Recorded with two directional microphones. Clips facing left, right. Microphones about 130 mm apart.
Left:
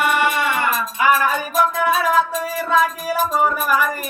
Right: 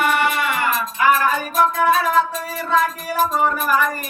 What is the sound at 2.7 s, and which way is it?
Music, 10° left (ahead or behind).